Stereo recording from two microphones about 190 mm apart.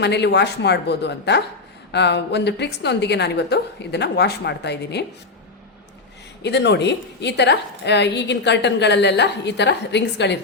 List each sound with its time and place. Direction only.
0.0 s a woman's voice: 65° left (ahead or behind)
6.4 s a woman's voice: 65° left (ahead or behind)